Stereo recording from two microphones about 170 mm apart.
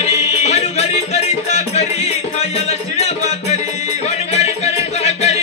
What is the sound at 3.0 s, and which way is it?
Music, 40° left (ahead or behind).